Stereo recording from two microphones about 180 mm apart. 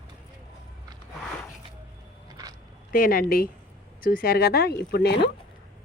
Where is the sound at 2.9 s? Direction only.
50° left (ahead or behind).